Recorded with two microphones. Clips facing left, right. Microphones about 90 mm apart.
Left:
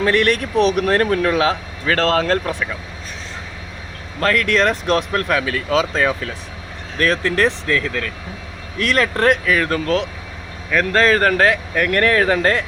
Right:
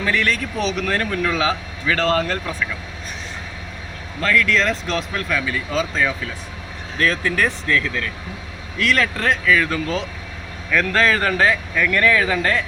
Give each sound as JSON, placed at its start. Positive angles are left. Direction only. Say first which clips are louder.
{"t": 0.1, "sound": "speech", "louder": "left 2 dB", "side_deg": 60}
{"t": 4.2, "sound": "speech", "louder": "left 2 dB", "side_deg": 55}
{"t": 5.9, "sound": "speech", "louder": "left 3 dB", "side_deg": 55}
{"t": 7.0, "sound": "speech", "louder": "left 3 dB", "side_deg": 70}
{"t": 8.8, "sound": "speech", "louder": "left 3 dB", "side_deg": 45}
{"t": 10.8, "sound": "a man's voice", "louder": "left 3 dB", "side_deg": 35}
{"t": 11.2, "sound": "speech", "louder": "left 3 dB", "side_deg": 50}